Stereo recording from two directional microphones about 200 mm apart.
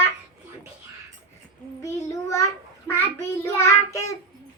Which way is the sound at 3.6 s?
15° left (ahead or behind).